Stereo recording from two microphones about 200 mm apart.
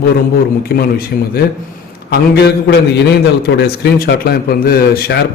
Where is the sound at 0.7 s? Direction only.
50° left (ahead or behind).